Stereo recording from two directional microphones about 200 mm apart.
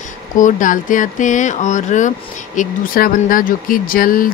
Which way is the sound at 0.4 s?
40° left (ahead or behind).